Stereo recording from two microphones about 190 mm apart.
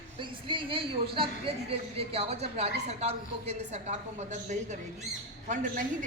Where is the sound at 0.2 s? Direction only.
25° right (ahead or behind).